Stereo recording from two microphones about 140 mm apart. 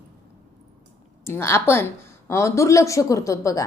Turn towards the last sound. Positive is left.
turn(degrees=25)  # may be behind; listen again after turning